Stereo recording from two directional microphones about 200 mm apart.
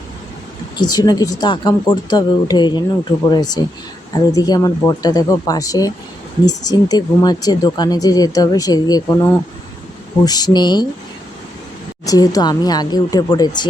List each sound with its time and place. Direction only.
0.8 s speech: 20° left (ahead or behind)
10.2 s speech: 20° left (ahead or behind)
12.0 s speech: 20° left (ahead or behind)